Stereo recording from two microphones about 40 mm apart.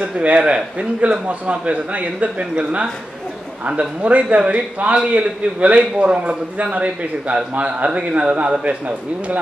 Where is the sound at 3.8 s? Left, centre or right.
Right.